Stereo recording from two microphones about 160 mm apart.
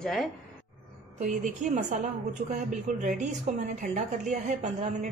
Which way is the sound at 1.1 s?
50° right (ahead or behind).